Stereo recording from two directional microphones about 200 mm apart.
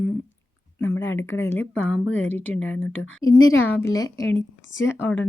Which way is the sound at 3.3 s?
85° left.